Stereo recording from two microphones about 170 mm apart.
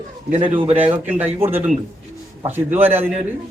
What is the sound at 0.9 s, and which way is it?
A man's voice, 10° right (ahead or behind).